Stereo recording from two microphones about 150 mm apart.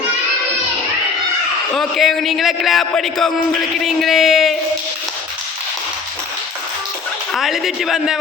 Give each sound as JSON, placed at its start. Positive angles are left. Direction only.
{"t": 1.7, "sound": "a man's voice", "side_deg": 0}
{"t": 7.3, "sound": "a man's voice", "side_deg": 0}